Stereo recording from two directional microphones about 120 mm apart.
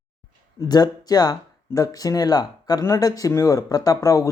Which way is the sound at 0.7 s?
35° left (ahead or behind).